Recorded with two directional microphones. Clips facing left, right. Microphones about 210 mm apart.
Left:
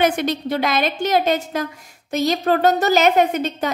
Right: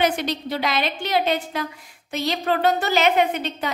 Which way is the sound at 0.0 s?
50° left (ahead or behind).